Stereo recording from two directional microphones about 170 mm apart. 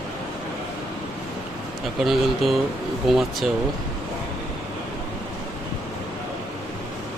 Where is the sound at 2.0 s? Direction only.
Centre (ahead or behind).